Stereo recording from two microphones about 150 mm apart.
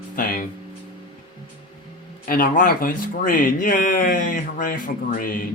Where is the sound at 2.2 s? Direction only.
70° left (ahead or behind).